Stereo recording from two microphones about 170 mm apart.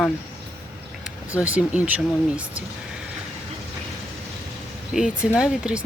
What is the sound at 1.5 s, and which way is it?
Speech, 10° right (ahead or behind).